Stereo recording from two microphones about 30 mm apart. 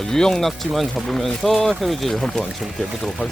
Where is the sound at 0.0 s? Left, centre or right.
Centre.